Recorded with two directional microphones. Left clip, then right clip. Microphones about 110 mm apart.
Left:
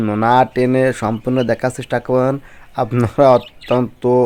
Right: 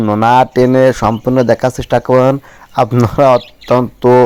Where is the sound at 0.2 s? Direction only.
45° right (ahead or behind).